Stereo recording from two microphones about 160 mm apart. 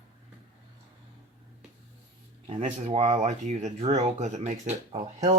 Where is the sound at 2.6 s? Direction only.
45° right (ahead or behind).